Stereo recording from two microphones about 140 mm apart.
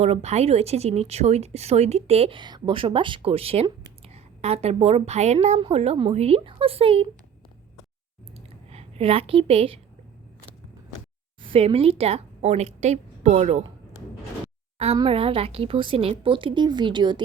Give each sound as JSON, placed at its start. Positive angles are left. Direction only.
{"t": 0.0, "sound": "a woman's voice", "side_deg": -50}
{"t": 5.5, "sound": "a woman's voice", "side_deg": -40}
{"t": 8.7, "sound": "a woman's voice", "side_deg": -45}
{"t": 11.4, "sound": "a woman's voice", "side_deg": -45}
{"t": 14.9, "sound": "a woman's voice", "side_deg": -40}